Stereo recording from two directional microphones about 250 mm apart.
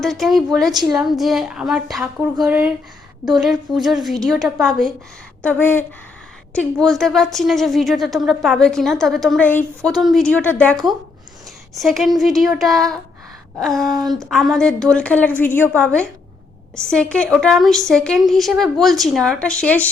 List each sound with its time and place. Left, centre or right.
0.0 s a woman's voice: centre
0.7 s speech: centre
0.9 s a woman's voice: centre
11.8 s a woman's voice: centre